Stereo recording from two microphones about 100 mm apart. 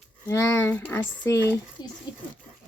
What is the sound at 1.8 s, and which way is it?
Speech, 45° left (ahead or behind).